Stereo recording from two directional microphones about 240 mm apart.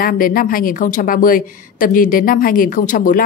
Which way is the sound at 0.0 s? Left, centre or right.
Left.